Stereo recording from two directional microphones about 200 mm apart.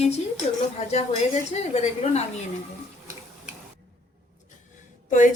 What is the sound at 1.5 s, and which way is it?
Speech, 35° left (ahead or behind).